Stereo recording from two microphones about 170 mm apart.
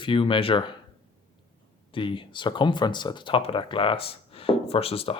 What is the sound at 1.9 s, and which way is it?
Speech, 30° left (ahead or behind).